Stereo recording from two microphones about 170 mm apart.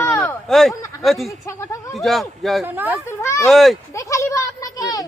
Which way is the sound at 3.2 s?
15° left (ahead or behind).